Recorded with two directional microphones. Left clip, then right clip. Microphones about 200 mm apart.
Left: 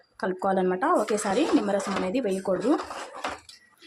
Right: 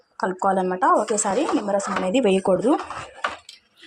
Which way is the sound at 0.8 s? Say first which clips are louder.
Right 8 dB; centre (ahead or behind).